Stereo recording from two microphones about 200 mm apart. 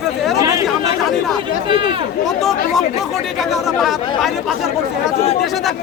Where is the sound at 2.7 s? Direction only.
Centre (ahead or behind).